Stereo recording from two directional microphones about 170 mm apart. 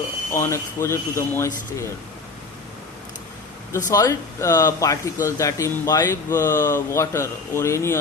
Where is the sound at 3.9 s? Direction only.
20° left (ahead or behind).